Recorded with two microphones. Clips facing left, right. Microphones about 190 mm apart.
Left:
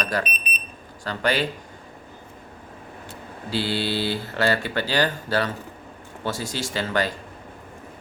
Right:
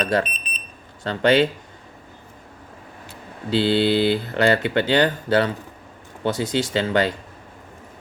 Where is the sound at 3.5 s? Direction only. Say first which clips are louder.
Right 7 dB; 20° right (ahead or behind).